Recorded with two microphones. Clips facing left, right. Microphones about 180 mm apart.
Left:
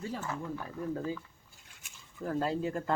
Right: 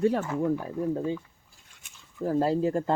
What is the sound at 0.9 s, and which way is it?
Speech, 25° right (ahead or behind).